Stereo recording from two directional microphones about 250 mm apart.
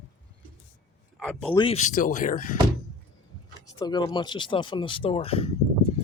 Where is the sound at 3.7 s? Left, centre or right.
Centre.